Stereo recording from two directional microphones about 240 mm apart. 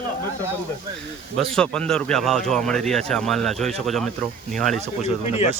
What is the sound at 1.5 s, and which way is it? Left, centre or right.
Speech, centre.